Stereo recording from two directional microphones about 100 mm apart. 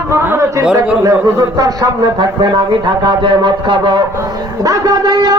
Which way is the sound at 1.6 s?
40° right (ahead or behind).